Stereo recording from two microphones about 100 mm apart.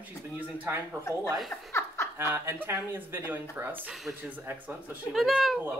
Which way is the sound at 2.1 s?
25° right (ahead or behind).